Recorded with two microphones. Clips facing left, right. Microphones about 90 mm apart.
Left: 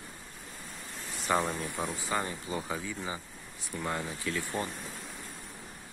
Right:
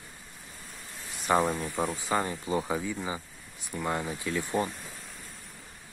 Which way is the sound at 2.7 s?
10° right (ahead or behind).